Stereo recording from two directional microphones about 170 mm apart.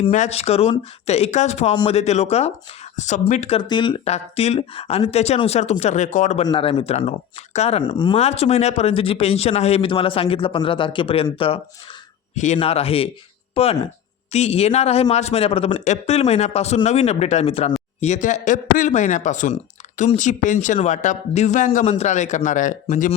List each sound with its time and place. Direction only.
0.1 s speech: 40° left (ahead or behind)
1.7 s speech: 25° left (ahead or behind)
2.0 s a man's voice: 40° left (ahead or behind)
3.6 s a man's voice: 25° left (ahead or behind); by 6.5 s 45° left (ahead or behind)
6.5 s speech: 30° left (ahead or behind)
8.2 s speech: 40° left (ahead or behind)
12.3 s speech: 45° left (ahead or behind)
12.5 s a man's voice: 35° left (ahead or behind)